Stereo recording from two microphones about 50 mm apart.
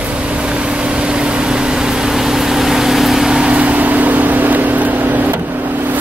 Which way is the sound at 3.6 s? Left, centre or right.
Right.